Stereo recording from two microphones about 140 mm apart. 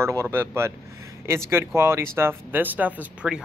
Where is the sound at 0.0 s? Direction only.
20° right (ahead or behind).